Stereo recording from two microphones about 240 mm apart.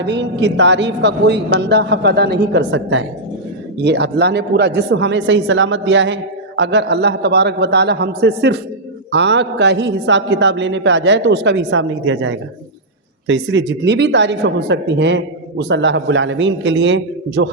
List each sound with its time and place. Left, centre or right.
0.0 s speech: right